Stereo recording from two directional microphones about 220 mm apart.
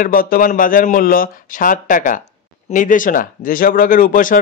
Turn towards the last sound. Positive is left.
turn(degrees=35)  # may be behind; listen again after turning